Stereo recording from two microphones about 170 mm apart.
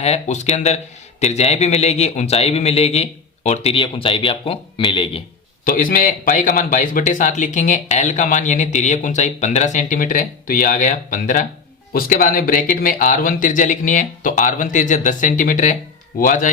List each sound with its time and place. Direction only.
0.0 s a man's voice: 40° left (ahead or behind)
5.6 s a man's voice: 50° left (ahead or behind)